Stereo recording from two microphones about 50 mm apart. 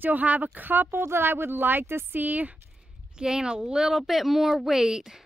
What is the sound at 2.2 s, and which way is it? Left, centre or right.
Speech, right.